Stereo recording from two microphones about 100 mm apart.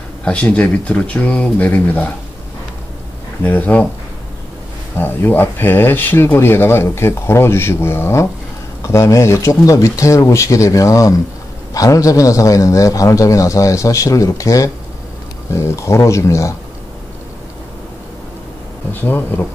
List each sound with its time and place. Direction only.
0.2 s speech: 10° left (ahead or behind)
3.4 s speech: 20° left (ahead or behind)
4.9 s a man's voice: 20° left (ahead or behind)
18.9 s speech: 20° left (ahead or behind)